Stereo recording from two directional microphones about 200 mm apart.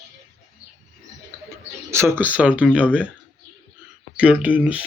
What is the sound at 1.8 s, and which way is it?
Speech, 15° right (ahead or behind).